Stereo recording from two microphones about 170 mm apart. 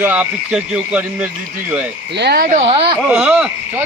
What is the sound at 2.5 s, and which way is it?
Speech, 40° right (ahead or behind).